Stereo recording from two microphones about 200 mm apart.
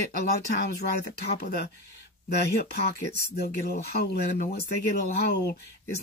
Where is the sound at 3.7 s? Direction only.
50° left (ahead or behind).